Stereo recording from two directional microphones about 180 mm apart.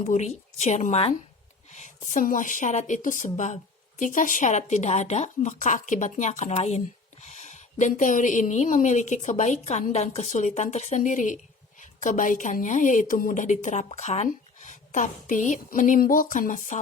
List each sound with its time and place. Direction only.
0.0 s a woman's voice: 40° left (ahead or behind)